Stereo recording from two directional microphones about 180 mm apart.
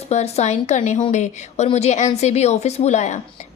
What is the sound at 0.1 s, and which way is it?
A woman's voice, 35° left (ahead or behind).